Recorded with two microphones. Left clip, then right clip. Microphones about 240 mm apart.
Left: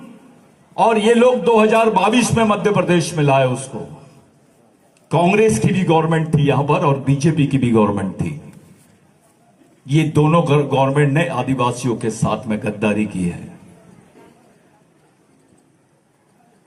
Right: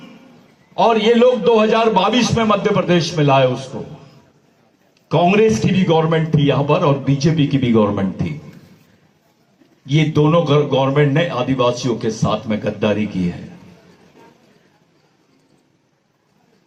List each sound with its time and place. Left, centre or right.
0.8 s a man's voice: left
5.0 s a man's voice: left
9.8 s a man's voice: left